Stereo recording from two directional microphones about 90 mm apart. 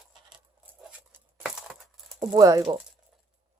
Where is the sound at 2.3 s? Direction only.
40° right (ahead or behind).